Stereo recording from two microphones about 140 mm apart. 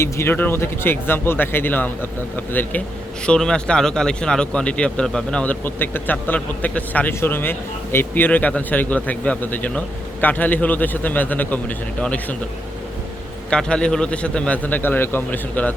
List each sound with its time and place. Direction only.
0.0 s speech: 15° left (ahead or behind)
13.5 s speech: 5° left (ahead or behind)